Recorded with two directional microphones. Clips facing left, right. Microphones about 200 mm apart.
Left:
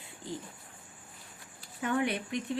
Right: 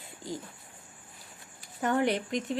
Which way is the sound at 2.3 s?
90° right.